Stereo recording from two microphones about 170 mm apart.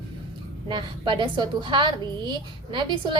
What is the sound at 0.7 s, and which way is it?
A woman's voice, 25° right (ahead or behind).